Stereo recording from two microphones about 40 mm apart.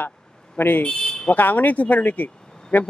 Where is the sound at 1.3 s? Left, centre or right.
Left.